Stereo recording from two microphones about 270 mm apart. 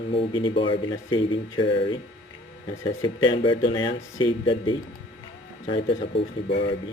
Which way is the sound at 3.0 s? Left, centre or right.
Centre.